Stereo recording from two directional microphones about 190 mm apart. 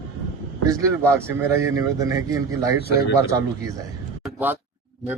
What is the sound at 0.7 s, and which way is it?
Speech, 15° right (ahead or behind).